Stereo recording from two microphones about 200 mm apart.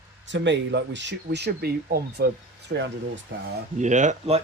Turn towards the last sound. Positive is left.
turn(degrees=-35)  # may be behind; listen again after turning